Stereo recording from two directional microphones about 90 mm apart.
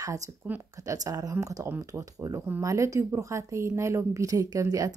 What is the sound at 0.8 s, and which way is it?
Speech, 40° right (ahead or behind).